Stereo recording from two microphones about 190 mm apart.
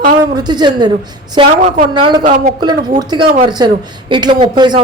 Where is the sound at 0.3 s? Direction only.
20° right (ahead or behind).